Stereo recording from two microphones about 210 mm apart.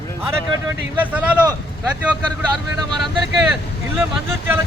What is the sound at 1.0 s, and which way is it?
Speech, 5° right (ahead or behind).